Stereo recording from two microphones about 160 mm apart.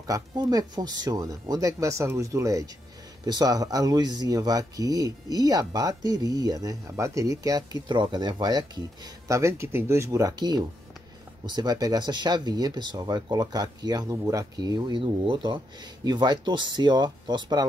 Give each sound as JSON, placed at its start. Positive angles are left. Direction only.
{"t": 0.0, "sound": "speech", "side_deg": -25}